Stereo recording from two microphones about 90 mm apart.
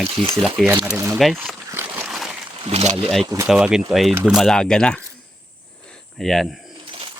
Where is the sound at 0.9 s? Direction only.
35° right (ahead or behind).